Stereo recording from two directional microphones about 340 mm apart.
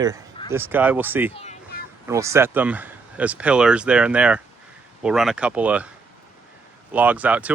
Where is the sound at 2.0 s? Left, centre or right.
Centre.